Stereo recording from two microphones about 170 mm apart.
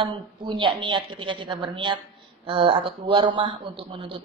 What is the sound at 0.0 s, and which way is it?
A woman's voice, 30° right (ahead or behind).